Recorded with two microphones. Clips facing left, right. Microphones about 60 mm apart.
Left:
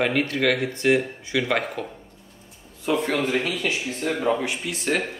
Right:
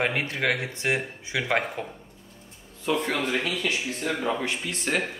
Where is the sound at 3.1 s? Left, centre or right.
Left.